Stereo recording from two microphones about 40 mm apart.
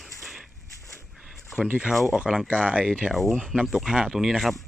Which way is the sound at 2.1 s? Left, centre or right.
Right.